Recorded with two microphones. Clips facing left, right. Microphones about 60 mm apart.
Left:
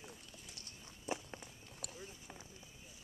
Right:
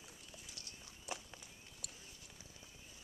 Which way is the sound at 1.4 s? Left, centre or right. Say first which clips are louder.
Left 4 dB; left.